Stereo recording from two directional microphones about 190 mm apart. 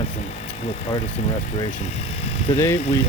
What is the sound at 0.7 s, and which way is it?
Speech, 35° left (ahead or behind).